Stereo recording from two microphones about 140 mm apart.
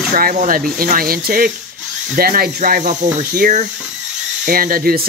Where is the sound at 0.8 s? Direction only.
90° right.